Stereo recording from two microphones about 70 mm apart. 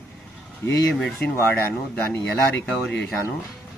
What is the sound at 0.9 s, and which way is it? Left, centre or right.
Speech, centre.